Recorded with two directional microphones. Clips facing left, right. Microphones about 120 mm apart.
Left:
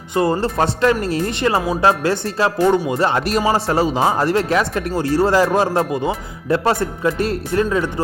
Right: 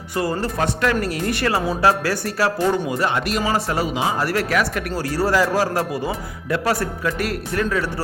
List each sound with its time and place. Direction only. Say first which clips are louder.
0.1 s speech: left 5 dB; 25° left (ahead or behind)
4.2 s speech: left 4 dB; 25° left (ahead or behind)